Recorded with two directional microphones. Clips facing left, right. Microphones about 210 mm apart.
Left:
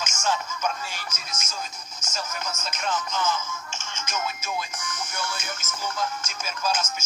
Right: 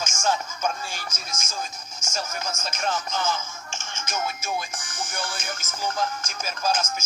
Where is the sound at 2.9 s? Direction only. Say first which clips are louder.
Left 2 dB; 30° right (ahead or behind).